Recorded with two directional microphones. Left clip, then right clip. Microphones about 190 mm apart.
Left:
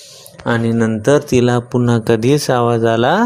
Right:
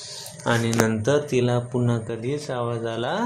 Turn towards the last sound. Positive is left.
turn(degrees=45)  # may be behind; listen again after turning